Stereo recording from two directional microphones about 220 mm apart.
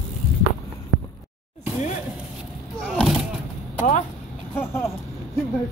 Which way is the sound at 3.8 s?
35° left (ahead or behind).